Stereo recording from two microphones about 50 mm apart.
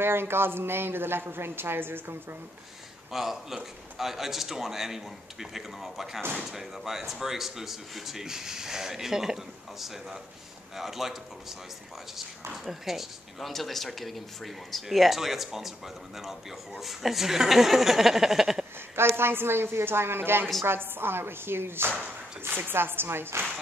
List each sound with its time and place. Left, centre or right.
0.0 s speech: right
3.1 s a man's voice: centre
12.6 s a man's voice: centre
18.9 s speech: right